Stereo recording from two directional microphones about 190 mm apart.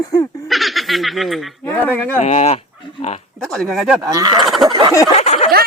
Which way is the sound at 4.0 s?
20° right (ahead or behind).